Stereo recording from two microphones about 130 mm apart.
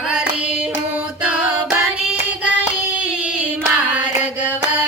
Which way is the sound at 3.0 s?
10° right (ahead or behind).